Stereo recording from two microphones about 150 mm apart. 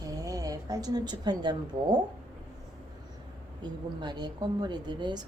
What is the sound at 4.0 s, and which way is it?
A woman's voice, 30° right (ahead or behind).